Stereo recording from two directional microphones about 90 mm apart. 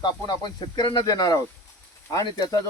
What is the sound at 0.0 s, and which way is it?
Speech, 55° left (ahead or behind).